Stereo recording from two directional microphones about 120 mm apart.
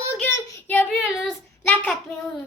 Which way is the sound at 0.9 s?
Centre (ahead or behind).